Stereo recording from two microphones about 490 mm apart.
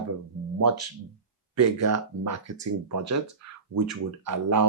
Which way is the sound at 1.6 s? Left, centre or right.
Right.